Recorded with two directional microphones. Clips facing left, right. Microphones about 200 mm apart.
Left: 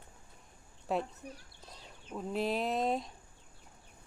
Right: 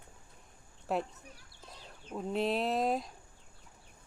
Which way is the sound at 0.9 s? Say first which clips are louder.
Even; centre (ahead or behind).